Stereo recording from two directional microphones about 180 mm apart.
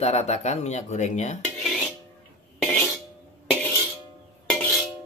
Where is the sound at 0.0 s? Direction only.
35° left (ahead or behind).